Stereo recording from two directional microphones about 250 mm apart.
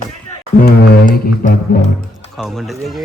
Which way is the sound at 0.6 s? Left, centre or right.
Left.